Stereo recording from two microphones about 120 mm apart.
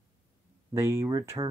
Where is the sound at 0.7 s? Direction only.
25° right (ahead or behind).